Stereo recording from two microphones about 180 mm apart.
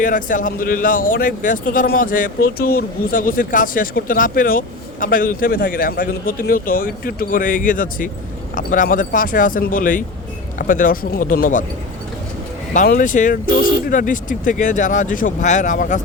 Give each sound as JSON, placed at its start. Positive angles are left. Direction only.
{"t": 0.0, "sound": "a man's voice", "side_deg": 45}
{"t": 12.7, "sound": "a man's voice", "side_deg": 45}